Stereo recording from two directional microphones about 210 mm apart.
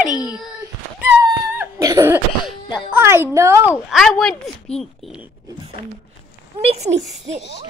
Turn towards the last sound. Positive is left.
turn(degrees=-30)  # may be behind; listen again after turning